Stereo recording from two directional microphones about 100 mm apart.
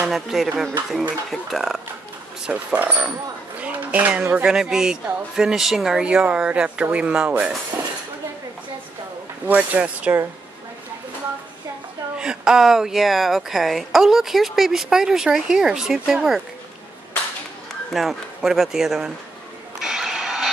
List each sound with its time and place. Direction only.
0.0 s speech: centre (ahead or behind)
2.4 s speech: 15° right (ahead or behind)
9.5 s speech: 15° right (ahead or behind)
12.2 s speech: 5° right (ahead or behind)
17.9 s speech: 5° right (ahead or behind)
19.8 s a sound: 5° right (ahead or behind)